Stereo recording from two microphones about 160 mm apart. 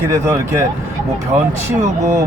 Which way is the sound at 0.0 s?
15° right (ahead or behind).